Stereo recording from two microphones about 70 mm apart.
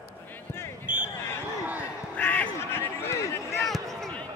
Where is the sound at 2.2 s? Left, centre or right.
Left.